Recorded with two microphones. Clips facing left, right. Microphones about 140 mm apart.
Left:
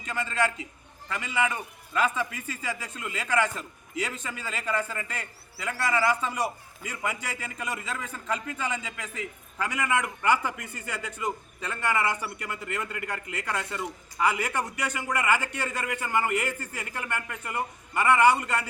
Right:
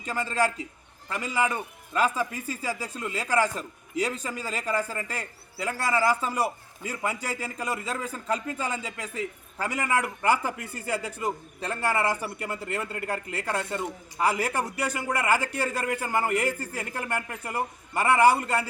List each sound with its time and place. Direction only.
0.0 s a man's voice: 35° right (ahead or behind)